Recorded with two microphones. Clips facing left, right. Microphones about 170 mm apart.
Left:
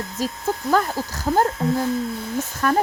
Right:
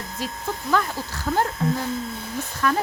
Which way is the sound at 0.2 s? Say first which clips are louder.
Left 5 dB; 40° left (ahead or behind).